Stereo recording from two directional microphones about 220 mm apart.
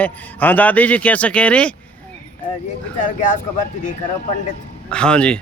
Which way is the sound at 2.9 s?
35° left (ahead or behind).